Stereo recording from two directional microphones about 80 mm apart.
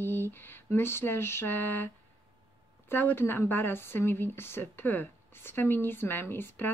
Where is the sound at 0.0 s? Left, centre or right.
Left.